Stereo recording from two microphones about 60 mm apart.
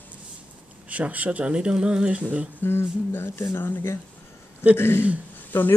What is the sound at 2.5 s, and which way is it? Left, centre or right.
Speech, left.